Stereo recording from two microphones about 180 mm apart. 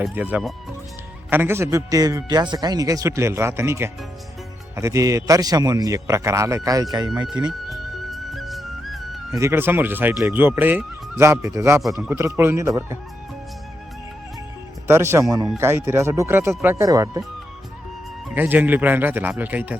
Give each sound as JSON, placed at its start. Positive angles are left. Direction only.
{"t": 0.0, "sound": "a man's voice", "side_deg": -10}
{"t": 7.7, "sound": "music", "side_deg": 0}
{"t": 9.3, "sound": "a man's voice", "side_deg": -15}
{"t": 14.8, "sound": "a man's voice", "side_deg": -15}
{"t": 18.3, "sound": "a man's voice", "side_deg": -10}